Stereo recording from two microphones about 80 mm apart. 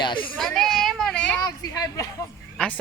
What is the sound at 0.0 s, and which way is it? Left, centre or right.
Speech, left.